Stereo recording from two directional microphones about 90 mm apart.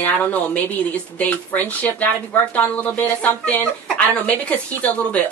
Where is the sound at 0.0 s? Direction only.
20° left (ahead or behind).